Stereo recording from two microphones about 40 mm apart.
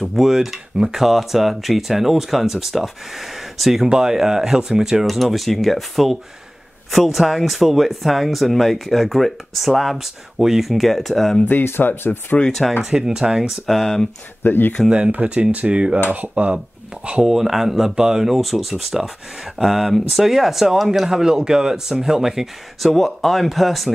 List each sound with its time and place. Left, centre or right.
0.1 s speech: centre
11.6 s speech: left
12.8 s speech: centre
13.4 s speech: centre
14.4 s speech: left
14.9 s speech: right
15.5 s cutlery: right
16.1 s speech: right
17.3 s speech: centre
21.1 s speech: centre
22.8 s speech: centre